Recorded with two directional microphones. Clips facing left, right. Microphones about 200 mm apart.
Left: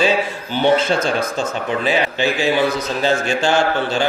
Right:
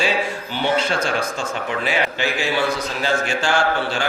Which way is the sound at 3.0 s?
25° left (ahead or behind).